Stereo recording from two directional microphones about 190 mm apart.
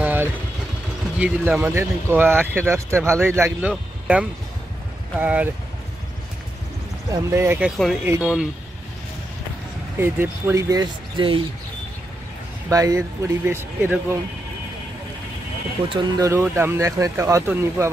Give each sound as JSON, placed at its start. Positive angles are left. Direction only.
{"t": 0.0, "sound": "vehicle", "side_deg": -10}
{"t": 1.1, "sound": "speech", "side_deg": -5}
{"t": 7.1, "sound": "speech", "side_deg": -15}
{"t": 9.9, "sound": "speech", "side_deg": -10}
{"t": 12.6, "sound": "speech", "side_deg": -15}
{"t": 15.9, "sound": "speech", "side_deg": -20}